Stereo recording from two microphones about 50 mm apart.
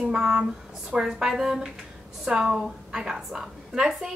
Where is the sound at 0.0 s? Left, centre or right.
Centre.